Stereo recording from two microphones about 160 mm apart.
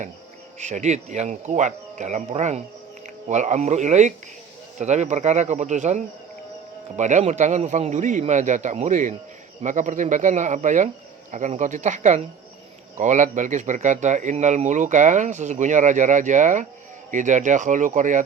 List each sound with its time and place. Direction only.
0.6 s speech: 45° right (ahead or behind)